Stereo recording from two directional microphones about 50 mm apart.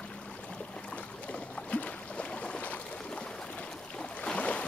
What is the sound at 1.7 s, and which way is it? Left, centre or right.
Boat, left.